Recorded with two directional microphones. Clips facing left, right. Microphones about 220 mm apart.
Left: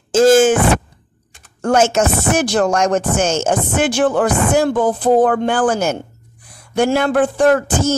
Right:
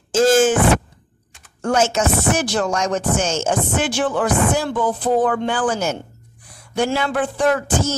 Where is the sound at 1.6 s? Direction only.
55° left (ahead or behind).